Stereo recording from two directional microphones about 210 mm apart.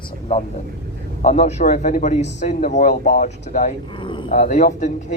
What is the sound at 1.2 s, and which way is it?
A man's voice, 35° left (ahead or behind).